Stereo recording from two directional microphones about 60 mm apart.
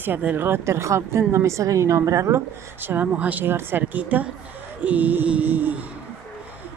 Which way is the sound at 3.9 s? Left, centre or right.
Right.